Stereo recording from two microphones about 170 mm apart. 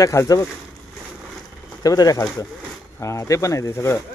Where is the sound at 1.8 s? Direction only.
20° left (ahead or behind).